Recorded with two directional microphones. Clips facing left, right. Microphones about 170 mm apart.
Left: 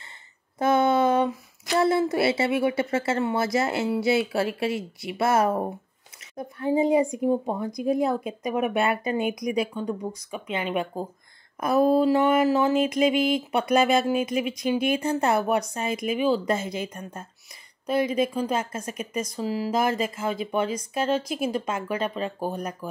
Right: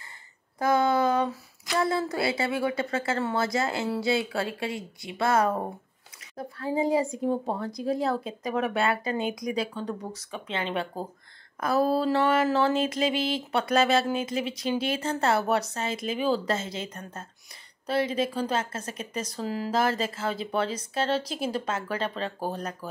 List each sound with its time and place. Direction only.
0.6 s a sound: 25° left (ahead or behind)
3.1 s a woman's voice: 20° left (ahead or behind)
18.3 s a woman's voice: 10° left (ahead or behind)